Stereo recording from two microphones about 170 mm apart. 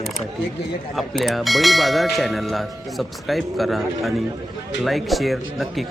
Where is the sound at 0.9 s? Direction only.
Centre (ahead or behind).